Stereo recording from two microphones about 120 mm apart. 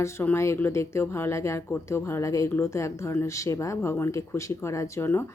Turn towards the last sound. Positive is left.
turn(degrees=20)  # may be behind; listen again after turning